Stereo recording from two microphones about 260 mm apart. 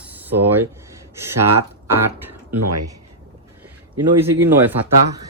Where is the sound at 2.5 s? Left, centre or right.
Right.